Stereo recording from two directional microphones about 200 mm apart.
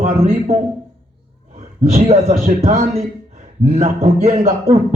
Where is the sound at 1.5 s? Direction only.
35° right (ahead or behind).